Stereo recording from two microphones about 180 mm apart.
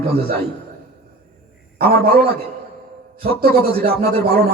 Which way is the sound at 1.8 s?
60° right (ahead or behind).